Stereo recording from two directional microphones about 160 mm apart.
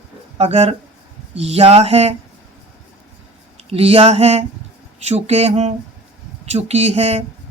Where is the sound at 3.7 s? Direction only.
40° right (ahead or behind).